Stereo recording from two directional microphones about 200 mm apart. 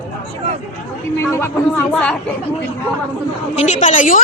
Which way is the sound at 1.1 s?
10° left (ahead or behind).